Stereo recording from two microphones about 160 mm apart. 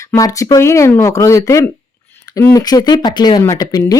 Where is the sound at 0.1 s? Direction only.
20° left (ahead or behind).